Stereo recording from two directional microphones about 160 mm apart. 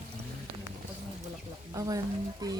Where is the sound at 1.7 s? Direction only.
20° right (ahead or behind).